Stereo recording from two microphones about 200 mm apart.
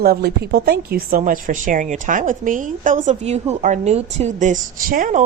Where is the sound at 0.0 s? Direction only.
50° right (ahead or behind).